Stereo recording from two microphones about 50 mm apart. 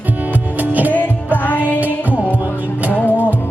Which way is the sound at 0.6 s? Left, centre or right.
Right.